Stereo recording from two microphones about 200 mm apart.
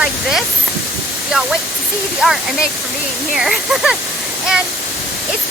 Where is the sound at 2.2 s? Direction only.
Centre (ahead or behind).